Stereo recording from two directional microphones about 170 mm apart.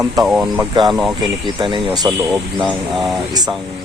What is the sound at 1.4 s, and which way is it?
Speech, 30° right (ahead or behind).